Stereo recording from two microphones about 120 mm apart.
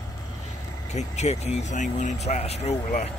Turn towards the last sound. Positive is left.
turn(degrees=65)  # may be behind; listen again after turning